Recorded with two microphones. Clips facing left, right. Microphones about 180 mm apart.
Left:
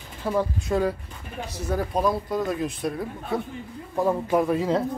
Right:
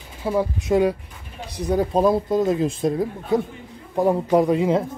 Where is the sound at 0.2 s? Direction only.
15° right (ahead or behind).